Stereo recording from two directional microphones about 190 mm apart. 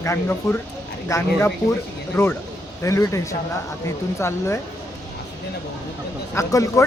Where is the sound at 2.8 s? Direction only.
15° left (ahead or behind).